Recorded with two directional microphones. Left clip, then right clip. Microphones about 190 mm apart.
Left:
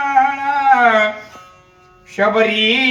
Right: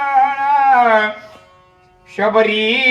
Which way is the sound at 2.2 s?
55° right (ahead or behind).